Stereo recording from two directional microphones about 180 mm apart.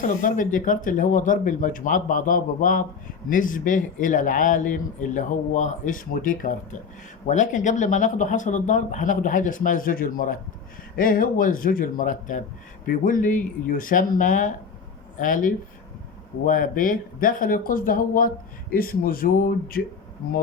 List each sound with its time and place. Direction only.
0.2 s a man's voice: 50° left (ahead or behind)